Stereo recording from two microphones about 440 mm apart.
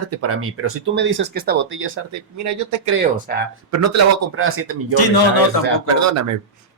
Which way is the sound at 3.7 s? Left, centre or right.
Right.